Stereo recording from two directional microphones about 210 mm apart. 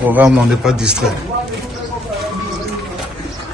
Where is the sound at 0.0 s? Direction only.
5° right (ahead or behind).